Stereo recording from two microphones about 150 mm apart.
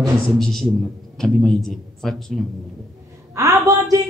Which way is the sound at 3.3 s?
20° right (ahead or behind).